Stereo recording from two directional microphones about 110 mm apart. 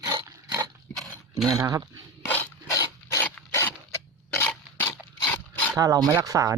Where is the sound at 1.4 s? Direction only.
35° right (ahead or behind).